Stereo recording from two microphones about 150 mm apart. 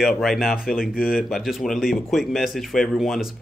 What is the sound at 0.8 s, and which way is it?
Speech, 75° left (ahead or behind).